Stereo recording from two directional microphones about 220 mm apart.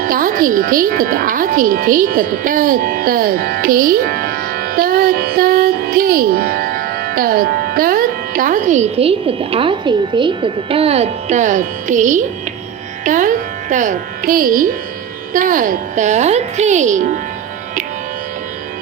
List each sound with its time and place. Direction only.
0.0 s speech: 40° right (ahead or behind)